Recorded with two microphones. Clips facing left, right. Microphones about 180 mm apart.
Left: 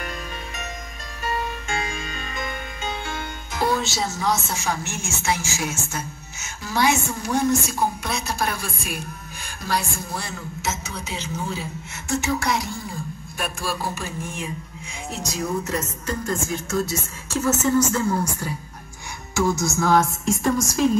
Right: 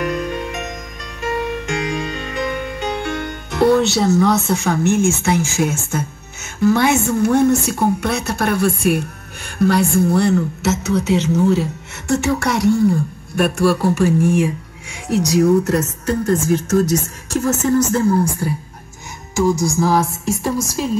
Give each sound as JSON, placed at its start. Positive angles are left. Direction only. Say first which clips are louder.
{"t": 0.0, "sound": "music", "louder": "right 12 dB", "side_deg": -70}
{"t": 9.6, "sound": "a woman's voice", "louder": "right 13 dB", "side_deg": -60}
{"t": 17.4, "sound": "a woman's voice", "louder": "right 3 dB", "side_deg": -35}
{"t": 17.9, "sound": "a woman's voice", "louder": "right 7 dB", "side_deg": -55}
{"t": 19.4, "sound": "music", "louder": "right 5 dB", "side_deg": -10}